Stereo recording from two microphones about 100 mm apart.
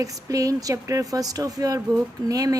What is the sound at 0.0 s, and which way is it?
A woman's voice, 35° right (ahead or behind).